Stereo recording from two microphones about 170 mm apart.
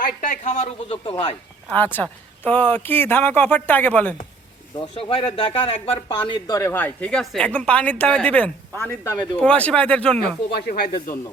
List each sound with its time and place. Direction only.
0.0 s speech: 50° left (ahead or behind)
1.7 s a woman's voice: 10° left (ahead or behind)
4.8 s speech: 30° left (ahead or behind)
6.6 s a woman's voice: 15° left (ahead or behind)
10.5 s speech: 65° left (ahead or behind)